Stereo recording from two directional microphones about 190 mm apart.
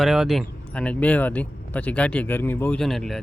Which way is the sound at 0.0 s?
Centre (ahead or behind).